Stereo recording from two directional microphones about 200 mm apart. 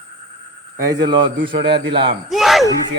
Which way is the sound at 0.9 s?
20° right (ahead or behind).